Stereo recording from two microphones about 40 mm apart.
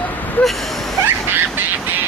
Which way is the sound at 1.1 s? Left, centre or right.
Right.